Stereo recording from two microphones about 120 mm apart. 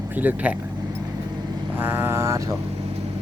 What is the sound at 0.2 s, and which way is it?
Speech, 15° right (ahead or behind).